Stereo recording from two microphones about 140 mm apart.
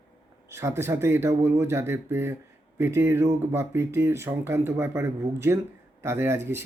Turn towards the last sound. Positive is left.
turn(degrees=-20)  # may be behind; listen again after turning